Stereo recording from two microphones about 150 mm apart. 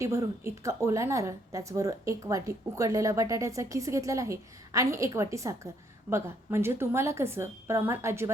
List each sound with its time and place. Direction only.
0.0 s a woman's voice: 20° right (ahead or behind)